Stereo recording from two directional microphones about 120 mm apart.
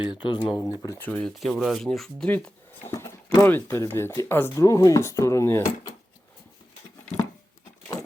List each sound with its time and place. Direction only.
0.0 s speech: 40° left (ahead or behind)
0.9 s speech: 15° left (ahead or behind)
1.2 s speech: centre (ahead or behind); by 5.7 s 25° left (ahead or behind)